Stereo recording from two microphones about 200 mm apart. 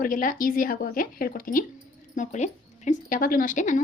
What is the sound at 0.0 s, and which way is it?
Speech, 45° left (ahead or behind).